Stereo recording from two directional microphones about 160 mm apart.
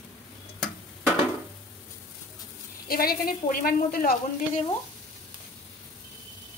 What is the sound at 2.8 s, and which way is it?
A woman's voice, 65° left (ahead or behind).